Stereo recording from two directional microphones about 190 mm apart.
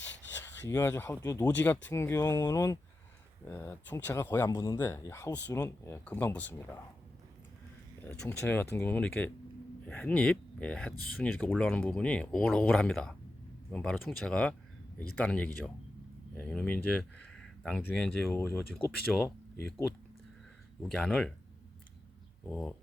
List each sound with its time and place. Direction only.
0.0 s rub: 70° left (ahead or behind)
0.7 s speech: 10° left (ahead or behind)
8.0 s speech: 10° left (ahead or behind)
20.8 s speech: 5° left (ahead or behind)
22.4 s speech: 5° left (ahead or behind)